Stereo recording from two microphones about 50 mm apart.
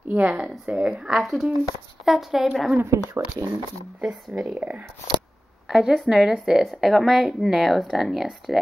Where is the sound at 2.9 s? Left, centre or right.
Right.